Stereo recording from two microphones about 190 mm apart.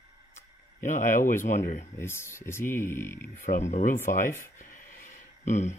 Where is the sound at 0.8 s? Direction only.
45° left (ahead or behind).